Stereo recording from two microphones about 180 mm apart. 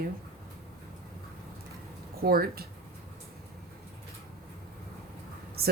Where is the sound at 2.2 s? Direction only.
55° right (ahead or behind).